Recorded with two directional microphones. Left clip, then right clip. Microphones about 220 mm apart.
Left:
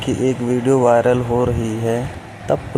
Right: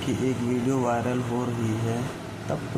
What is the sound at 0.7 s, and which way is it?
Speech, 25° left (ahead or behind).